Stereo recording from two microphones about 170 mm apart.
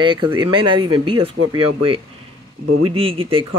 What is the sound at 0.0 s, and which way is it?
Speech, 25° right (ahead or behind).